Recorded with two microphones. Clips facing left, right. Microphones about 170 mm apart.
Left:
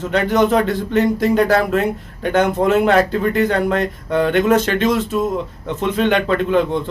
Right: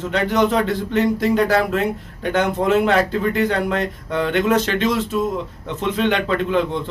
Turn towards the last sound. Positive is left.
turn(degrees=50)  # may be behind; listen again after turning